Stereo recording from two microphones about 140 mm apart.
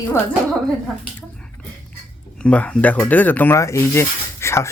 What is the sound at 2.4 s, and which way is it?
A woman's voice, 10° left (ahead or behind).